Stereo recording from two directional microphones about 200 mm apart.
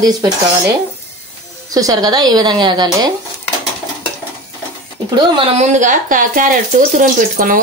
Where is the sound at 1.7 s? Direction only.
20° right (ahead or behind).